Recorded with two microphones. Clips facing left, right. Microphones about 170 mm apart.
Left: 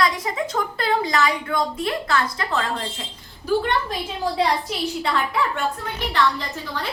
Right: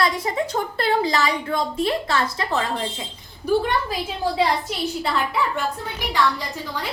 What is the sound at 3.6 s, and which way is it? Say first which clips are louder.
A woman's voice: even; 5° right (ahead or behind).